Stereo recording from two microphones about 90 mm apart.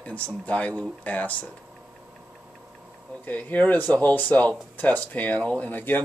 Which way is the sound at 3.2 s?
15° left (ahead or behind).